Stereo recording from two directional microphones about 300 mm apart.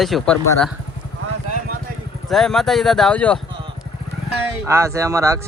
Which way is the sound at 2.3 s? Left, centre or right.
Centre.